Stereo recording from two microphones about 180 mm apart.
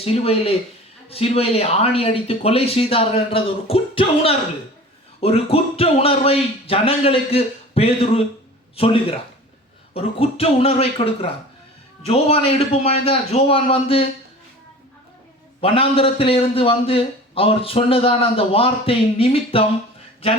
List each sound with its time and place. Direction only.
0.0 s a man's voice: 35° left (ahead or behind)
15.6 s a man's voice: 30° left (ahead or behind)